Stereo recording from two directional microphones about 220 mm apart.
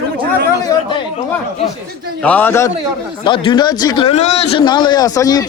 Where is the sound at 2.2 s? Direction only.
10° left (ahead or behind).